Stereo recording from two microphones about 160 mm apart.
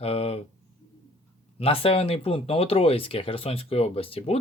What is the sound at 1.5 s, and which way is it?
Speech, 35° left (ahead or behind).